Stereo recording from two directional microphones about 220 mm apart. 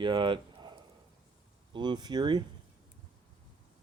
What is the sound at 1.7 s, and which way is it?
Speech, 20° right (ahead or behind).